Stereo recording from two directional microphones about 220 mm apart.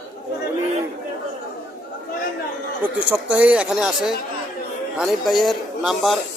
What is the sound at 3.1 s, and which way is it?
Speech, 5° right (ahead or behind).